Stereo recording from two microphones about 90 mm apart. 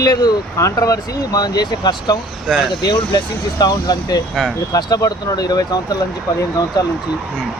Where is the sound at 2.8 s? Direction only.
50° left (ahead or behind).